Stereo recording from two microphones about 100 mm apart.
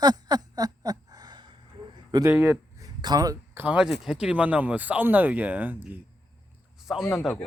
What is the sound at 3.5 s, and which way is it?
Speech, 15° right (ahead or behind).